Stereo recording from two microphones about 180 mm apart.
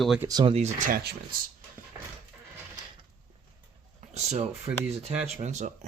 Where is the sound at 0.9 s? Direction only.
55° right (ahead or behind).